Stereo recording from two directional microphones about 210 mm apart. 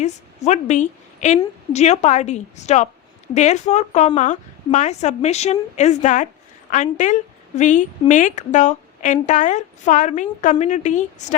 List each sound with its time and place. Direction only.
0.0 s a woman's voice: 35° left (ahead or behind)